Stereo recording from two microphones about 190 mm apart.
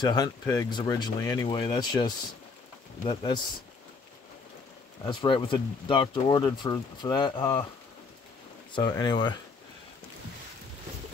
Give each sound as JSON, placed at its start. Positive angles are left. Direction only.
{"t": 0.0, "sound": "speech", "side_deg": 20}
{"t": 5.0, "sound": "speech", "side_deg": 25}
{"t": 8.7, "sound": "speech", "side_deg": 25}